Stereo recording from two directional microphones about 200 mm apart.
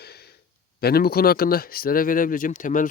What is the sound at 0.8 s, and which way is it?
Speech, 50° left (ahead or behind).